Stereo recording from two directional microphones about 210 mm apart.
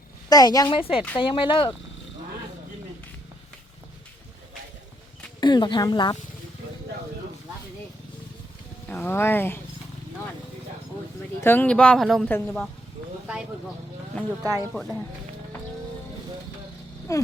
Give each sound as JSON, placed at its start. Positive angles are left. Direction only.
{"t": 0.3, "sound": "speech", "side_deg": 20}
{"t": 5.4, "sound": "speech", "side_deg": 20}
{"t": 8.9, "sound": "speech", "side_deg": 10}
{"t": 11.3, "sound": "speech", "side_deg": 10}
{"t": 14.1, "sound": "speech", "side_deg": 5}
{"t": 17.1, "sound": "speech", "side_deg": 15}